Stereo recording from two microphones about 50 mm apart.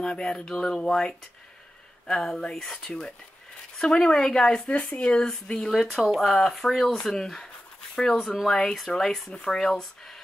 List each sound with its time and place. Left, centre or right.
0.0 s speech: centre
4.6 s speech: left
8.2 s speech: centre